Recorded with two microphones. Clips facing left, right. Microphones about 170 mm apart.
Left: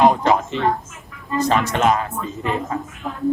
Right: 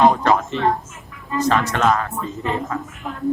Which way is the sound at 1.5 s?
20° left (ahead or behind).